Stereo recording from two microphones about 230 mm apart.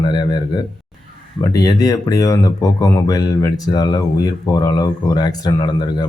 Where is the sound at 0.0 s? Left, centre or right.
Centre.